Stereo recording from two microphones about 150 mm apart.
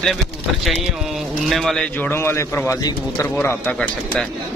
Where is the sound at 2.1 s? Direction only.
15° left (ahead or behind).